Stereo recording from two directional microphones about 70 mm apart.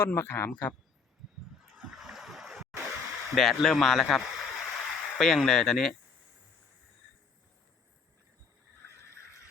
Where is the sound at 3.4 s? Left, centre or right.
Centre.